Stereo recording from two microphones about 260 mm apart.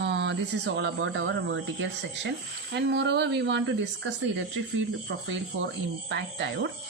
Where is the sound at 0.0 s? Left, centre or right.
Right.